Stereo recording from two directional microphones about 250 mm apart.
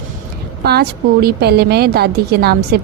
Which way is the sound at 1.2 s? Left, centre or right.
Right.